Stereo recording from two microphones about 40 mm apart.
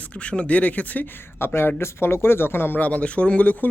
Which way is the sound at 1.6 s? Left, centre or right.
Left.